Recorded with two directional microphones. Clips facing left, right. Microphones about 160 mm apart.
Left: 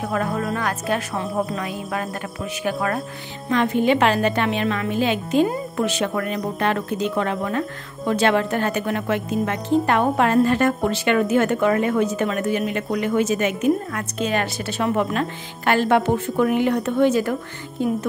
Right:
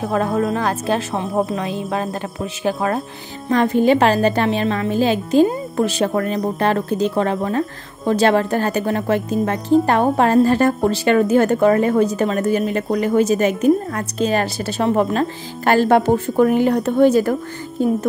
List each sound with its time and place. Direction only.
0.0 s a woman's voice: 30° right (ahead or behind)